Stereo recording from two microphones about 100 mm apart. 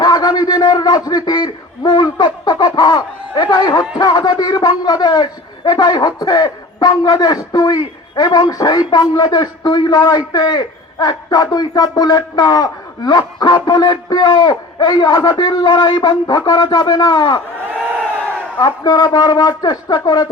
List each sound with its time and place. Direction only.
0.0 s a man's voice: 45° left (ahead or behind)
18.6 s speech: 40° left (ahead or behind)